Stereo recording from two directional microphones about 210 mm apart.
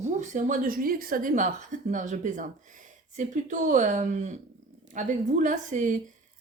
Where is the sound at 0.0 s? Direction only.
35° right (ahead or behind).